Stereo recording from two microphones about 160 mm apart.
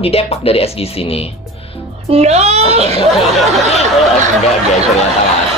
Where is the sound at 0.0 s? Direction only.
40° left (ahead or behind).